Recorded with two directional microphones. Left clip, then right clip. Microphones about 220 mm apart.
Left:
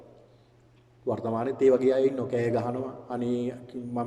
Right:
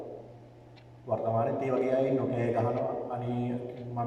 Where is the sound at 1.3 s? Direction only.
45° left (ahead or behind).